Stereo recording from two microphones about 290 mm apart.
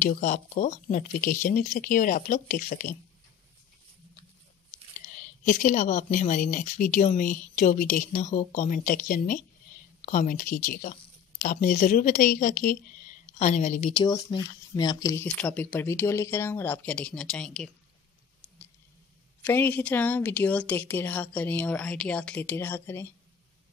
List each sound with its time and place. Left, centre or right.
0.0 s speech: left
5.4 s speech: left
14.0 s speech: centre
19.4 s speech: centre